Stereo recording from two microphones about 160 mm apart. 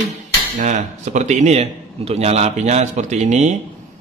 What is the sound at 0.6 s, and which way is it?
A man's voice, 50° right (ahead or behind).